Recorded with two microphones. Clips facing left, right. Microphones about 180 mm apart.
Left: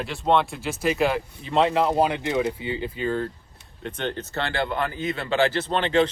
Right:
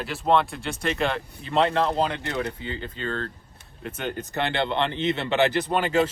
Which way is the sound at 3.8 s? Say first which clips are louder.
Left 2 dB; 5° right (ahead or behind).